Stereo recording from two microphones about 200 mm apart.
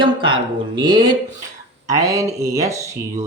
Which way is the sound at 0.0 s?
25° right (ahead or behind).